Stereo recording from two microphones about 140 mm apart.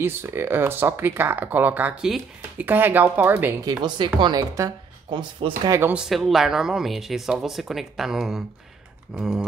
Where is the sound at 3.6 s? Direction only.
30° right (ahead or behind).